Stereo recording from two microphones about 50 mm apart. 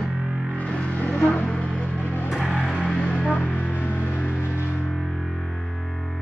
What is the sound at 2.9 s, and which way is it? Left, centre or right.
Music, left.